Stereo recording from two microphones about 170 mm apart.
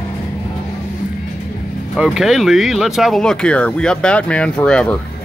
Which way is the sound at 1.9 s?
5° right (ahead or behind).